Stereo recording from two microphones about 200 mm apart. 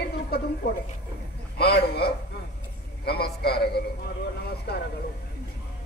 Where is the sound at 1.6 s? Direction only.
55° left (ahead or behind).